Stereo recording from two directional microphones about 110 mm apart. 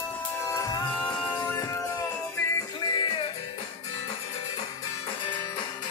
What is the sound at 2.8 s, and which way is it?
Music, 45° left (ahead or behind).